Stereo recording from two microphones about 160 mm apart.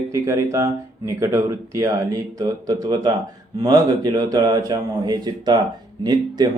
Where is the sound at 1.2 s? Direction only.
20° right (ahead or behind).